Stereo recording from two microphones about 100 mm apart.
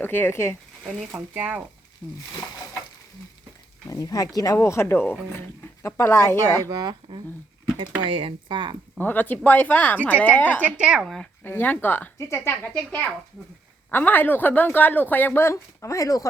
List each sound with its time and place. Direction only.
0.0 s speech: 20° left (ahead or behind)
0.9 s speech: 5° right (ahead or behind)
1.3 s speech: 15° right (ahead or behind)
2.0 s speech: 15° left (ahead or behind)
3.8 s speech: 35° left (ahead or behind)
6.7 s speech: 45° right (ahead or behind)
8.0 s speech: 60° right (ahead or behind)
9.0 s speech: 20° left (ahead or behind)
10.8 s speech: 10° right (ahead or behind)
11.0 s speech: 5° left (ahead or behind)
11.4 s speech: 20° left (ahead or behind); by 16.2 s 35° left (ahead or behind)